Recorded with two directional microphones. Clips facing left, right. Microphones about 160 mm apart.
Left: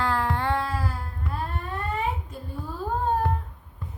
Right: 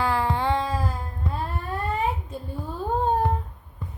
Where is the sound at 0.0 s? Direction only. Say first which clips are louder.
Right 2 dB; 10° right (ahead or behind).